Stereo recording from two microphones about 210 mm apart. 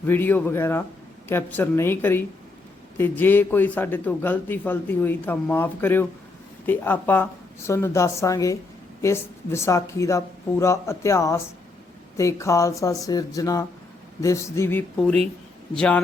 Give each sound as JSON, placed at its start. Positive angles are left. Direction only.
{"t": 0.0, "sound": "a man's voice", "side_deg": 10}